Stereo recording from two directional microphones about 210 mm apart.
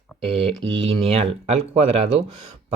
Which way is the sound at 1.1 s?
30° right (ahead or behind).